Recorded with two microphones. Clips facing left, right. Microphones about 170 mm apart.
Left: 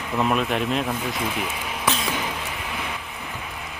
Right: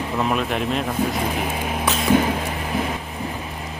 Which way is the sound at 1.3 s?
45° right (ahead or behind).